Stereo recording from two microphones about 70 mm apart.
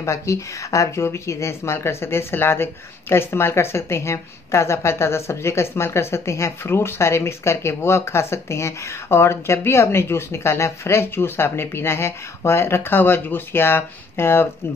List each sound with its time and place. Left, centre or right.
0.0 s speech: left